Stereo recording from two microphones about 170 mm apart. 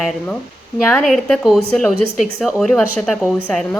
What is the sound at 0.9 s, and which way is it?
A woman's voice, centre (ahead or behind).